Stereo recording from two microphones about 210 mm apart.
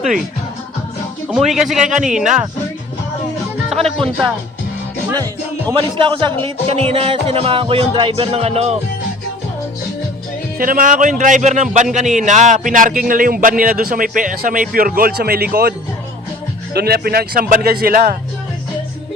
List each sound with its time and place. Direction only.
1.3 s speech: centre (ahead or behind)
5.7 s speech: 25° right (ahead or behind)
10.6 s a man's voice: 40° right (ahead or behind)
16.7 s a man's voice: 50° right (ahead or behind)